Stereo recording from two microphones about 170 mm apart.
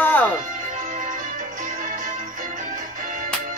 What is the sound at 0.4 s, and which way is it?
Music, 50° right (ahead or behind).